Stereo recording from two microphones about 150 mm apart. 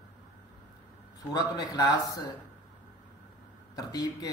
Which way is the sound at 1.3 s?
25° left (ahead or behind).